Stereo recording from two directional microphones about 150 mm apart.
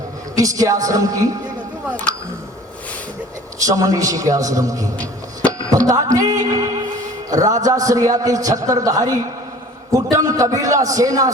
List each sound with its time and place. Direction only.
0.3 s a man's voice: 20° right (ahead or behind)
3.6 s a man's voice: 20° right (ahead or behind)
5.5 s music: 25° right (ahead or behind)
7.3 s a man's voice: 25° right (ahead or behind)